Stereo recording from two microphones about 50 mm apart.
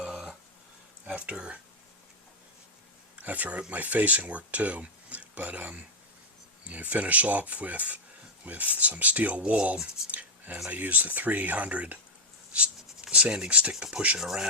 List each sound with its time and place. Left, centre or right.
0.0 s a sound: centre
1.0 s speech: right
3.2 s speech: right
9.7 s speech: centre
10.1 s speech: right
12.5 s writing: right
13.5 s speech: right
14.2 s speech: centre